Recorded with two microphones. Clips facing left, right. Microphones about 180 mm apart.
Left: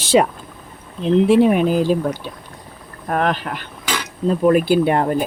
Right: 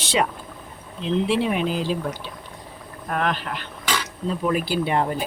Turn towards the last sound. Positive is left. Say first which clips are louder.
# left 6 dB
turn(degrees=50)  # may be behind; listen again after turning